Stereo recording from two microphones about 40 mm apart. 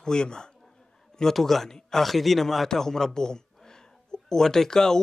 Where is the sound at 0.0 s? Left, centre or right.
Centre.